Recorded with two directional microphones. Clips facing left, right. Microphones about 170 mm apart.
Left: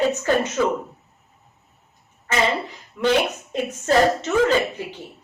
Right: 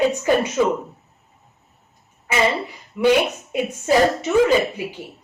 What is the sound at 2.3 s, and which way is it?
Speech, 10° right (ahead or behind).